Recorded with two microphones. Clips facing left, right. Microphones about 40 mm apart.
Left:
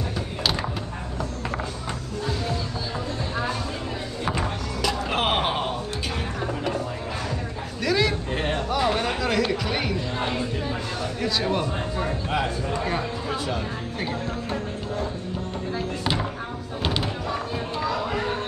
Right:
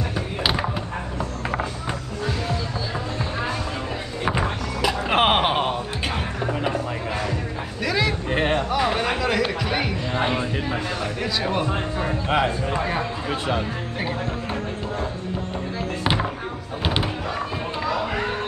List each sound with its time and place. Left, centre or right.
0.4 s a sound: centre
4.2 s music: right
7.8 s a sound: centre
8.3 s music: right
8.7 s a sound: centre
10.1 s music: right
11.3 s speech: centre
12.3 s a man's voice: right
16.0 s music: right